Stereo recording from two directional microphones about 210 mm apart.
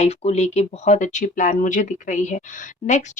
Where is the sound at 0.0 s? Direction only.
30° left (ahead or behind).